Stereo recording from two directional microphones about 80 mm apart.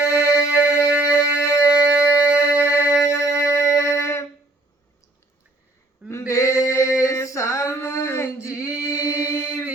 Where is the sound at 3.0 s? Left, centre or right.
Left.